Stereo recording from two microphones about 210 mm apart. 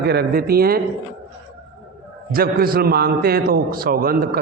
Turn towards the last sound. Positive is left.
turn(degrees=-45)  # may be behind; listen again after turning